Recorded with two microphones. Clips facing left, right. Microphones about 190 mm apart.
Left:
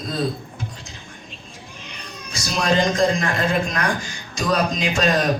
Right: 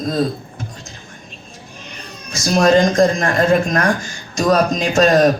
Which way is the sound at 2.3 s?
45° right (ahead or behind).